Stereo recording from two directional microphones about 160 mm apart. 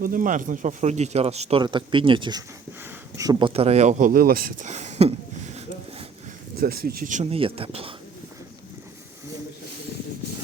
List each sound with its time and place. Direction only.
0.0 s speech: 55° right (ahead or behind)
4.6 s speech: 45° right (ahead or behind)
6.6 s speech: 70° right (ahead or behind)
7.3 s speech: 35° right (ahead or behind)